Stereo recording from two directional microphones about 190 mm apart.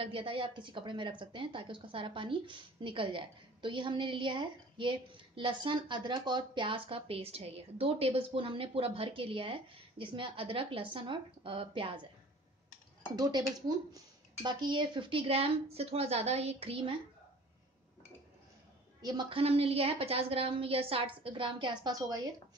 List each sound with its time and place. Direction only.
0.0 s speech: 30° right (ahead or behind)
13.1 s speech: 20° right (ahead or behind)
18.9 s speech: 20° right (ahead or behind)